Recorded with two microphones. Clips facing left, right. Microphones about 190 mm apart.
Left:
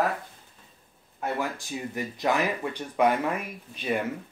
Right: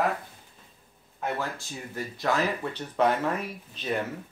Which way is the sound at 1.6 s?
15° left (ahead or behind).